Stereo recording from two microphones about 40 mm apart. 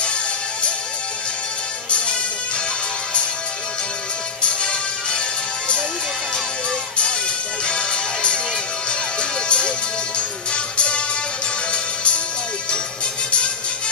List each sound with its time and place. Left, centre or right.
1.9 s music: left
4.4 s music: left
7.6 s music: left